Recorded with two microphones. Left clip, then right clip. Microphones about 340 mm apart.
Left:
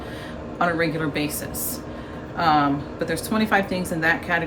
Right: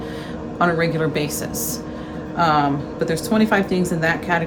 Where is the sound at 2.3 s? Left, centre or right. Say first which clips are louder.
Right 2 dB; centre.